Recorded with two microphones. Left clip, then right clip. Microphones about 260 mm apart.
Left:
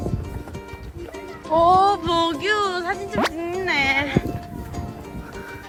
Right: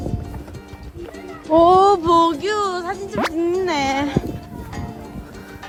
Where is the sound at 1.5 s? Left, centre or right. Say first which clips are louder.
Right 3 dB; right.